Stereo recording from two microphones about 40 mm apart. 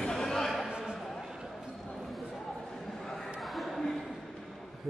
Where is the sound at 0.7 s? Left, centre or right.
Centre.